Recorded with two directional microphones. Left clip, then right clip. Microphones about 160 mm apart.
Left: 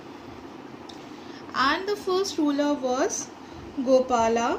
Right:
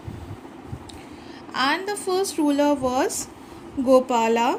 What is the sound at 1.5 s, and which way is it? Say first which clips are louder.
A woman's voice: right 1 dB; 40° right (ahead or behind).